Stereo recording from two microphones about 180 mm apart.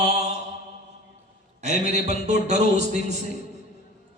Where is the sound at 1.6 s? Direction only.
40° right (ahead or behind).